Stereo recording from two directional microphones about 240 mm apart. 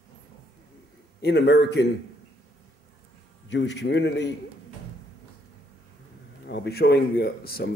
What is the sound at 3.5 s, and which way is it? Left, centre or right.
Speech, left.